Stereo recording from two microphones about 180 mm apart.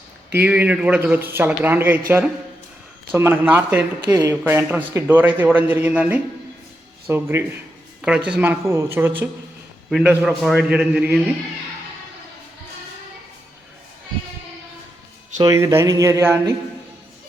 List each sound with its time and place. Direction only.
0.3 s a man's voice: 10° right (ahead or behind)
15.4 s speech: 20° right (ahead or behind)